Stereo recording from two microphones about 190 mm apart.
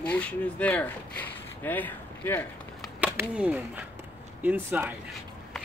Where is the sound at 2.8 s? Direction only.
5° right (ahead or behind).